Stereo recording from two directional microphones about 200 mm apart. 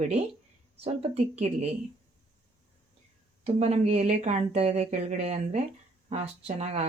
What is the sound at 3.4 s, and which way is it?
Speech, 30° right (ahead or behind).